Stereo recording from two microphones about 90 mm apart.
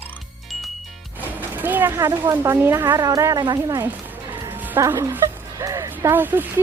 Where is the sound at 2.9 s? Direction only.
40° right (ahead or behind).